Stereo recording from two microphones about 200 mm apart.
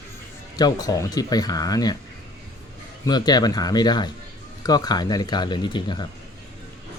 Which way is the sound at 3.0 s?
20° left (ahead or behind).